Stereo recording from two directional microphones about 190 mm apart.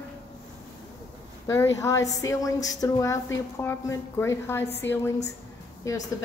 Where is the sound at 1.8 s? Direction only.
15° left (ahead or behind).